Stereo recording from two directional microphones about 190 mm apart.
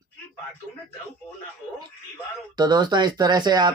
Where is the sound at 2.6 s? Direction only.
20° right (ahead or behind).